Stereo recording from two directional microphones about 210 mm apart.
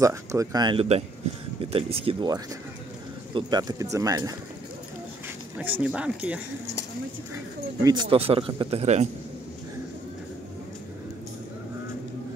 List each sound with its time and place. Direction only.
0.0 s speech: 15° right (ahead or behind)
5.6 s speech: 5° right (ahead or behind)
7.8 s speech: 20° right (ahead or behind)